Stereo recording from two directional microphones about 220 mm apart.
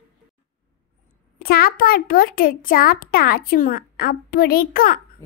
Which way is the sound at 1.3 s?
40° left (ahead or behind).